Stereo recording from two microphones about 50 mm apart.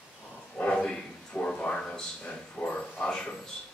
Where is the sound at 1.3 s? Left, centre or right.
Left.